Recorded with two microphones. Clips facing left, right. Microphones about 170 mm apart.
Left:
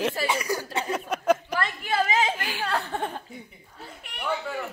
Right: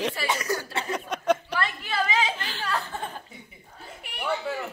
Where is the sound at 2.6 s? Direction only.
65° left (ahead or behind).